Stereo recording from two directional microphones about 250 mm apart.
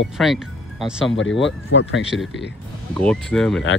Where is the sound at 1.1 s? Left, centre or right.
Left.